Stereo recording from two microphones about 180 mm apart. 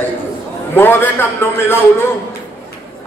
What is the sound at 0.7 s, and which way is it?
Speech, 10° left (ahead or behind).